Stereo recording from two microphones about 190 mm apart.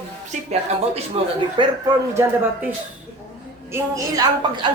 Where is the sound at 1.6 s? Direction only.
25° right (ahead or behind).